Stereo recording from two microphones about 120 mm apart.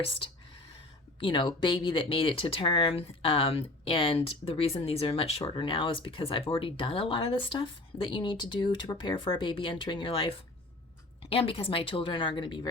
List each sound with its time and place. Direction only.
0.0 s speech: 50° left (ahead or behind)